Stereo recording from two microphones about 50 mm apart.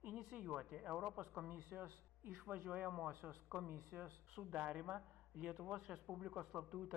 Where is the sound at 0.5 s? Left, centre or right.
Centre.